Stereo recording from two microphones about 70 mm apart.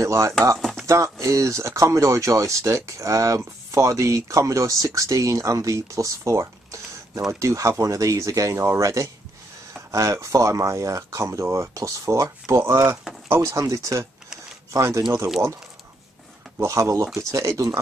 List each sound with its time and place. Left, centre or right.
0.0 s speech: right
0.6 s a sound: centre
0.8 s speech: right
16.6 s speech: right